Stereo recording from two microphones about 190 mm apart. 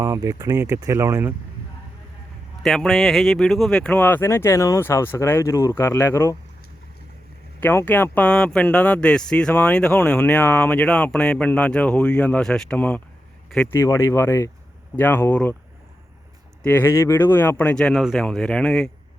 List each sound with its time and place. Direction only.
0.0 s speech: 15° right (ahead or behind)
2.6 s speech: centre (ahead or behind)
7.6 s speech: 10° left (ahead or behind)
13.7 s speech: 15° left (ahead or behind)
16.6 s speech: 10° left (ahead or behind)